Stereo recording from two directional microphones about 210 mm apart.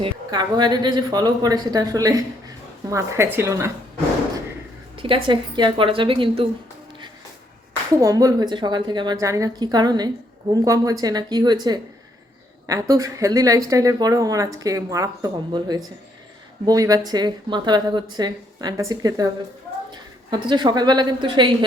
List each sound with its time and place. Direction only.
0.0 s speech: 20° right (ahead or behind)
4.9 s speech: 25° right (ahead or behind)
7.9 s a woman's voice: 15° right (ahead or behind)